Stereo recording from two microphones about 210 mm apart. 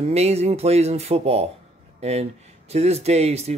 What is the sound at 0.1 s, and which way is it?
Speech, 30° right (ahead or behind).